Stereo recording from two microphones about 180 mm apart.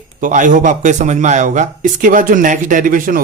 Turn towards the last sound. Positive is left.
turn(degrees=-50)  # may be behind; listen again after turning